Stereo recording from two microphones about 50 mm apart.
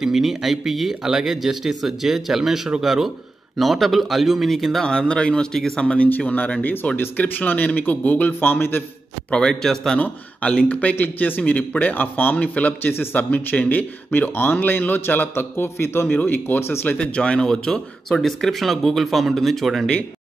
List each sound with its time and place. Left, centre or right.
0.0 s speech: centre
4.7 s speech: centre
5.9 s a man's voice: left
9.3 s speech: centre
9.9 s a man's voice: left
16.1 s a man's voice: left
17.0 s speech: centre